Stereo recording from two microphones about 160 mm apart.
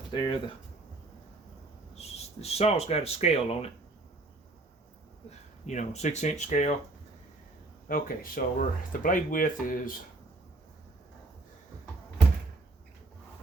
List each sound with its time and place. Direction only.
0.1 s speech: 30° left (ahead or behind)
2.0 s speech: 40° left (ahead or behind)
5.6 s speech: 45° left (ahead or behind)
7.9 s speech: 60° left (ahead or behind)